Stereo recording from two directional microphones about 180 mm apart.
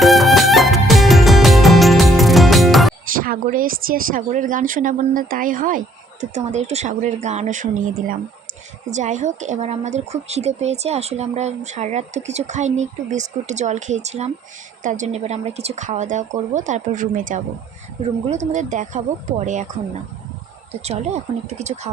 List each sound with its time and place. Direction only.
0.0 s music: centre (ahead or behind)
3.1 s a woman's voice: 50° right (ahead or behind)
20.8 s a woman's voice: 35° right (ahead or behind)